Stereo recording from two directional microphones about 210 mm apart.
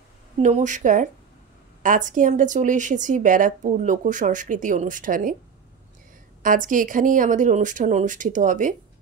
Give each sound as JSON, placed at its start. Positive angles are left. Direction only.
{"t": 0.4, "sound": "speech", "side_deg": -35}
{"t": 6.4, "sound": "speech", "side_deg": -40}